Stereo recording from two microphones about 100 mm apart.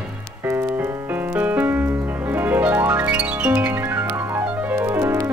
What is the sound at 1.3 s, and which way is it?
Music, 20° right (ahead or behind).